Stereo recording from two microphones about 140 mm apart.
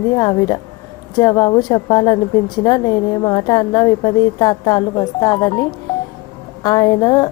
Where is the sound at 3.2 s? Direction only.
30° left (ahead or behind).